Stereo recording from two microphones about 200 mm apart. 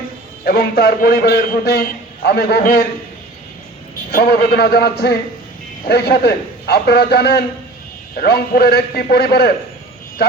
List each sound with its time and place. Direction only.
0.4 s a man's voice: 50° left (ahead or behind)
4.1 s a man's voice: 50° left (ahead or behind)